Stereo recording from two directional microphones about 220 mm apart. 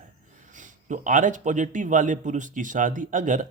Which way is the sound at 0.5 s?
35° right (ahead or behind).